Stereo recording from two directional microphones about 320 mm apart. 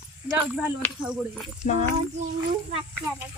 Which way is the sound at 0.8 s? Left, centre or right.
Centre.